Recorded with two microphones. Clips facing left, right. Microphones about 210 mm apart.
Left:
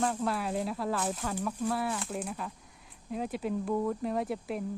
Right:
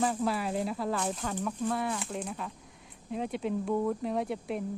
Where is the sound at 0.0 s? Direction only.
Centre (ahead or behind).